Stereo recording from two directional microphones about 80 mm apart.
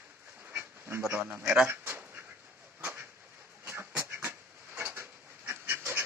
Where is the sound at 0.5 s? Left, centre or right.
Right.